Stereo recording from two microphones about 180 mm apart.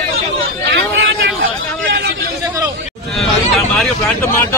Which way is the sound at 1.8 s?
90° right.